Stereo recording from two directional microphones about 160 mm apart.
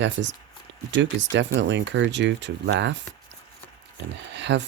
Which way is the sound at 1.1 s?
90° right.